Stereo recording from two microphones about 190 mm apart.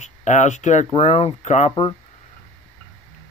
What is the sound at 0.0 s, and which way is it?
Speech, 40° left (ahead or behind).